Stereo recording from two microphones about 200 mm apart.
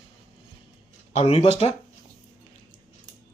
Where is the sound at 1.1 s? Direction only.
30° left (ahead or behind).